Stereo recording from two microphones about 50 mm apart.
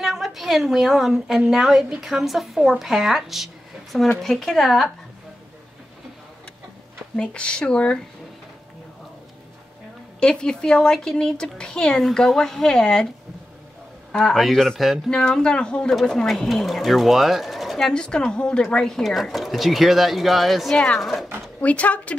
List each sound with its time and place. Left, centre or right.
0.0 s a woman's voice: centre
7.2 s speech: centre
10.2 s speech: centre
12.0 s speech: centre
14.3 s speech: centre
15.0 s speech: centre
17.8 s speech: centre
20.7 s speech: centre
21.5 s speech: left